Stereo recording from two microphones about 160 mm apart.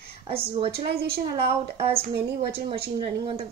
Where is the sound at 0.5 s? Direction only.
35° right (ahead or behind).